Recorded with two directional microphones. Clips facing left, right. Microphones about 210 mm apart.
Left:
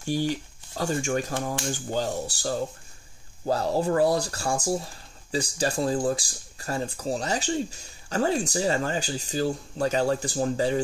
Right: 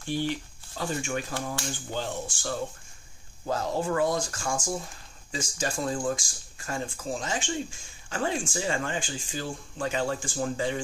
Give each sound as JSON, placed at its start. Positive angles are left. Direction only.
{"t": 0.1, "sound": "speech", "side_deg": 40}